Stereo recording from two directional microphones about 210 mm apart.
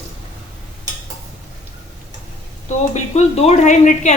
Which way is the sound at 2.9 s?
30° left (ahead or behind).